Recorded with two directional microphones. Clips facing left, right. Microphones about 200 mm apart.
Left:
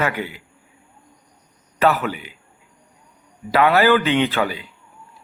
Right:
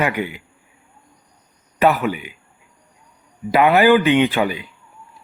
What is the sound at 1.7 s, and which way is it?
Speech, 15° right (ahead or behind).